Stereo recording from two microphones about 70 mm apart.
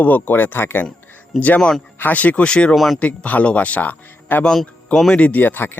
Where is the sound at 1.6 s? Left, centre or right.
Centre.